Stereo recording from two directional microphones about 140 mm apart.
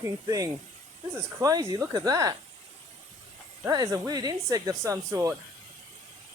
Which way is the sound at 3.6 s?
25° right (ahead or behind).